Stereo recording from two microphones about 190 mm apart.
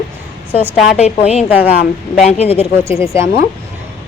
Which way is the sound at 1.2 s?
35° left (ahead or behind).